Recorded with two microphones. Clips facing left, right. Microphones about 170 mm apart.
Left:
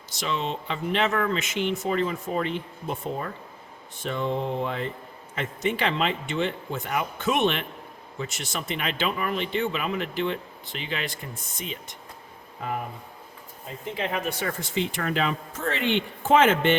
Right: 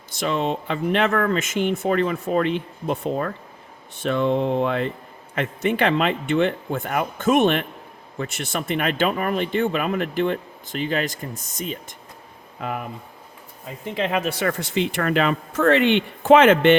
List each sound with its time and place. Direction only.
0.1 s speech: 50° right (ahead or behind)
13.9 s speech: 90° right; by 16.7 s 70° right (ahead or behind)